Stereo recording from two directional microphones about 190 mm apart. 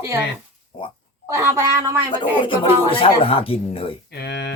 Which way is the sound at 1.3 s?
15° right (ahead or behind).